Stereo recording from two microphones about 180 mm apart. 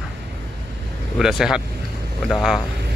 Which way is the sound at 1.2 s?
5° right (ahead or behind).